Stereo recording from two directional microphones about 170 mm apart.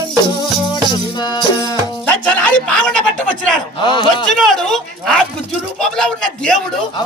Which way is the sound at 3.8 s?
25° left (ahead or behind).